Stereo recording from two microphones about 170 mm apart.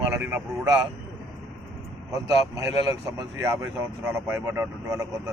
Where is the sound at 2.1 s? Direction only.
20° right (ahead or behind).